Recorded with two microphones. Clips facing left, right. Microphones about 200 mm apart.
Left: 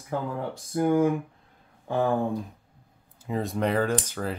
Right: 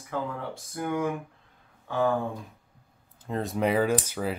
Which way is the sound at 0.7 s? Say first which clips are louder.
Left 7 dB; 35° left (ahead or behind).